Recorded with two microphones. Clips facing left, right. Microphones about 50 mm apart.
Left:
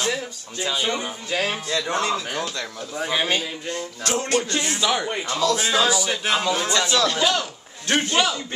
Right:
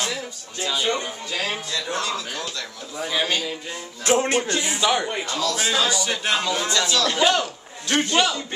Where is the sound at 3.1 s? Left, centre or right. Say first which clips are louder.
Left 1 dB; centre.